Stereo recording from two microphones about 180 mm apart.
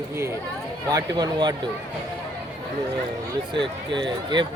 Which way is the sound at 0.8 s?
20° right (ahead or behind).